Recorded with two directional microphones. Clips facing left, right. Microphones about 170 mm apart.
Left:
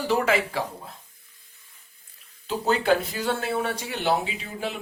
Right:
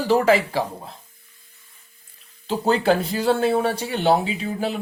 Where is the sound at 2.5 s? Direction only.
30° right (ahead or behind).